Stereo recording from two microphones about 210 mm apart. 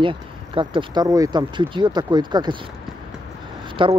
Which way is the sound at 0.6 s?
20° right (ahead or behind).